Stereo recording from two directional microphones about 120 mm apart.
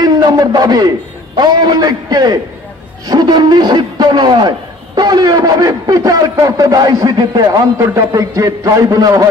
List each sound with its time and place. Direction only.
0.0 s a man's voice: 35° right (ahead or behind)